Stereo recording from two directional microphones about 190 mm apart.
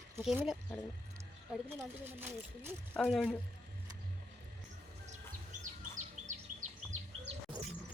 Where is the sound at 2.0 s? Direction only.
10° right (ahead or behind).